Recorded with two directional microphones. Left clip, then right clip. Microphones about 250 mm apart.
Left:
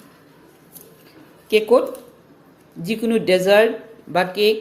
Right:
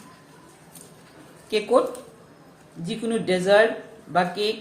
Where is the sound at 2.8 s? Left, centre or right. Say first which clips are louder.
Left 6 dB; left.